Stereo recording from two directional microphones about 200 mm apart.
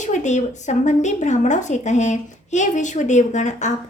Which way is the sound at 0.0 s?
35° left (ahead or behind).